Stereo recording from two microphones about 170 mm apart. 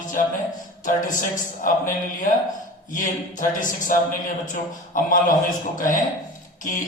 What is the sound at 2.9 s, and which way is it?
A man's voice, 50° left (ahead or behind).